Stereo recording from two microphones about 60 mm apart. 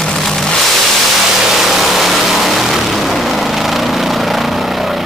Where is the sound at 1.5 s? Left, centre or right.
Centre.